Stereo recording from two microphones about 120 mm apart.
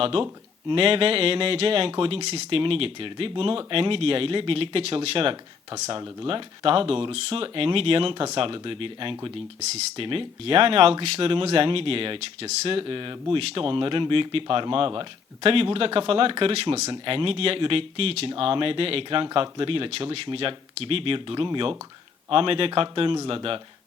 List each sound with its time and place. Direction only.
0.0 s speech: 50° right (ahead or behind)